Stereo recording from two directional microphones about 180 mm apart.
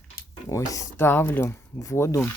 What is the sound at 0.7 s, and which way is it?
Speech, 15° left (ahead or behind).